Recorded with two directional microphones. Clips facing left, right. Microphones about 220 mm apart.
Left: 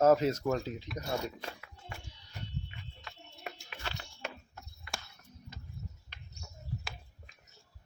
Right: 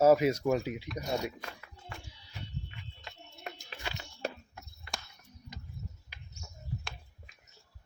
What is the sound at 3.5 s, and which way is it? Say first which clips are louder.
Music: even; 5° left (ahead or behind).